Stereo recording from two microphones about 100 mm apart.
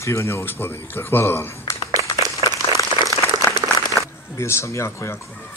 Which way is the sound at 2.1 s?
35° right (ahead or behind).